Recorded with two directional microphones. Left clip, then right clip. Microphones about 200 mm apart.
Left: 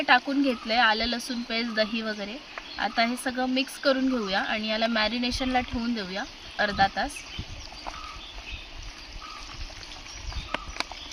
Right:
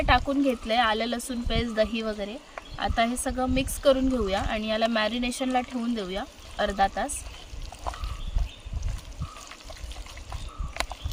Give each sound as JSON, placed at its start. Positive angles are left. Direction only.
{"t": 0.0, "sound": "speech", "side_deg": -10}